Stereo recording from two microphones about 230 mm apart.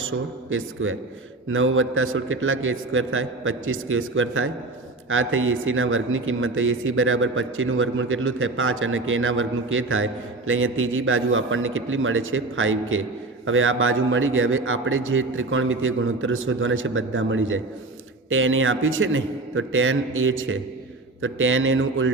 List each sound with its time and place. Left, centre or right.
0.5 s speech: right